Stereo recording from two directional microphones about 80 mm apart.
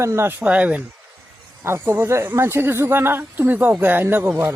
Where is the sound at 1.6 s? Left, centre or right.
Right.